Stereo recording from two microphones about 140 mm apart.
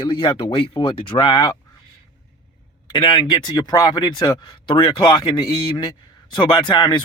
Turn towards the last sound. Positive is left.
turn(degrees=35)  # may be behind; listen again after turning